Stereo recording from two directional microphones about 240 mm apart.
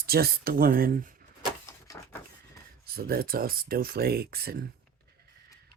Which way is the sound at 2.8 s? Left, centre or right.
Right.